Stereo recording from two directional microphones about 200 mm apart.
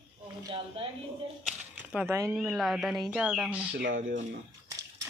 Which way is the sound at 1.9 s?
10° right (ahead or behind).